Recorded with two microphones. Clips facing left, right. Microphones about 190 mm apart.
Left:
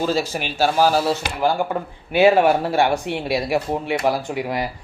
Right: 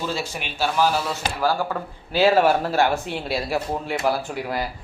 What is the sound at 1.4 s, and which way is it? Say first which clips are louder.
Speech: even; 20° left (ahead or behind).